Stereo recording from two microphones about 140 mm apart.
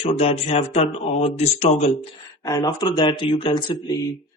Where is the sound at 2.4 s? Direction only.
30° left (ahead or behind).